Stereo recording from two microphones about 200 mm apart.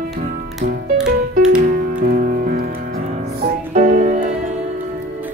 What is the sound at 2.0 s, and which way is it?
Music, 40° right (ahead or behind).